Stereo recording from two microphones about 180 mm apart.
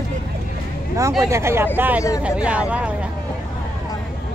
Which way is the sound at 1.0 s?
15° right (ahead or behind).